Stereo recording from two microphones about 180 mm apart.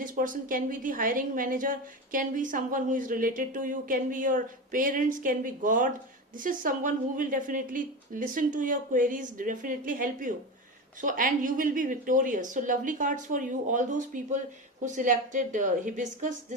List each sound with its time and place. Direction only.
0.0 s a woman's voice: 45° right (ahead or behind)